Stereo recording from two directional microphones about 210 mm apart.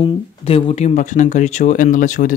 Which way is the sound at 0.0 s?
25° left (ahead or behind).